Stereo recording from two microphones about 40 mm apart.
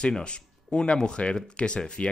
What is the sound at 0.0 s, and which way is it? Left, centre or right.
Speech, left.